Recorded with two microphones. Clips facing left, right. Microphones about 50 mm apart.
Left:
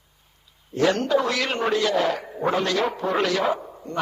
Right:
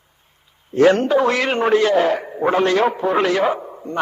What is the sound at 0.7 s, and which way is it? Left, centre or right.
A man's voice, right.